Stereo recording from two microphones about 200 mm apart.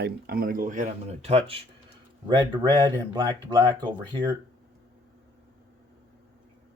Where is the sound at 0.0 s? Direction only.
50° right (ahead or behind); by 4.3 s 20° right (ahead or behind).